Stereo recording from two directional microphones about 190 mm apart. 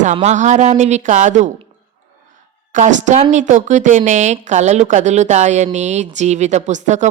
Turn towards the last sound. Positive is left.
turn(degrees=-40)  # may be behind; listen again after turning